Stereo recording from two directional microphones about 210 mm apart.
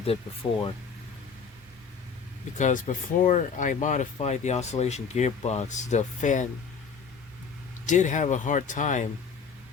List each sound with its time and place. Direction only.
0.4 s speech: 20° left (ahead or behind)
2.6 s speech: 35° left (ahead or behind)
7.9 s speech: 35° left (ahead or behind)